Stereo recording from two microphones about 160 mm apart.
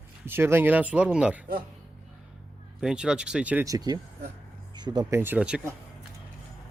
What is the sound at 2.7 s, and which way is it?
Speech, 5° right (ahead or behind).